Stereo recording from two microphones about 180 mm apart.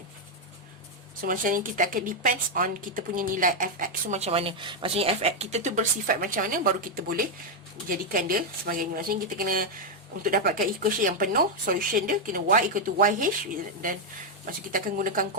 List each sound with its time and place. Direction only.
1.2 s a woman's voice: 50° right (ahead or behind)
14.4 s a woman's voice: 50° right (ahead or behind)